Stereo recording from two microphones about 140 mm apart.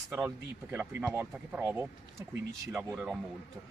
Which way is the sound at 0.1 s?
15° right (ahead or behind).